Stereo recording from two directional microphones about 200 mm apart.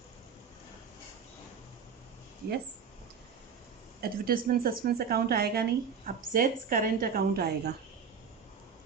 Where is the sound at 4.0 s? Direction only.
50° right (ahead or behind).